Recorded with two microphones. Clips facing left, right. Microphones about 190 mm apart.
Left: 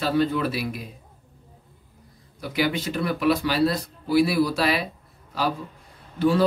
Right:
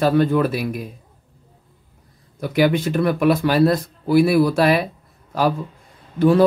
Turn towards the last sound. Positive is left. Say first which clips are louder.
# right 6 dB
turn(degrees=-50)  # may be behind; listen again after turning